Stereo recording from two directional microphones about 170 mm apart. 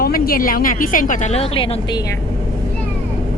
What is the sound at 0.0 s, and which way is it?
A woman's voice, 60° left (ahead or behind).